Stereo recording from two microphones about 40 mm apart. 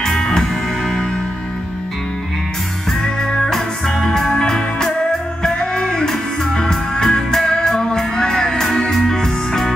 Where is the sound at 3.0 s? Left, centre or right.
Centre.